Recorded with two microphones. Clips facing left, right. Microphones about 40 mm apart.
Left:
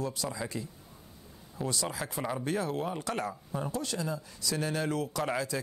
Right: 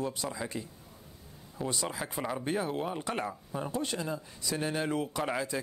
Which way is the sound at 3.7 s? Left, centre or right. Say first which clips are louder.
Right 2 dB; right.